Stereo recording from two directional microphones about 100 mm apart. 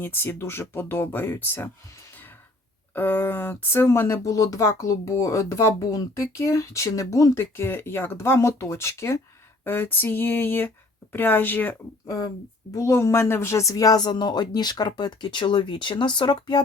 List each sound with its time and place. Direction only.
0.0 s speech: 20° left (ahead or behind)
2.9 s speech: 20° left (ahead or behind)
12.0 s speech: 40° left (ahead or behind)